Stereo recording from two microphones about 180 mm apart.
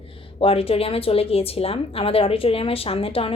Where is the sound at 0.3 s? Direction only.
30° left (ahead or behind).